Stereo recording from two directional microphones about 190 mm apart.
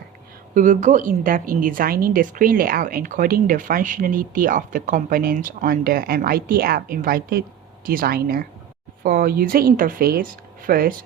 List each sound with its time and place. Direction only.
0.5 s a woman's voice: 45° right (ahead or behind)